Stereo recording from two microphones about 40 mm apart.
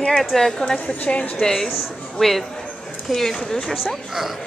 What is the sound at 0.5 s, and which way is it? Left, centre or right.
Speech, left.